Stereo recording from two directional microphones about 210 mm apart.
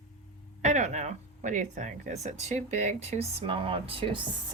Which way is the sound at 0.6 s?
35° right (ahead or behind).